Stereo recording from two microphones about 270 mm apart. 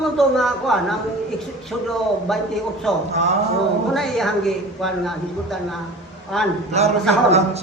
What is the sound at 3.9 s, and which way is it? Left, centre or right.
A woman's voice, centre.